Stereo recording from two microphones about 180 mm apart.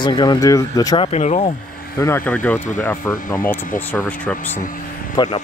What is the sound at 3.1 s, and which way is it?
Speech, 50° left (ahead or behind).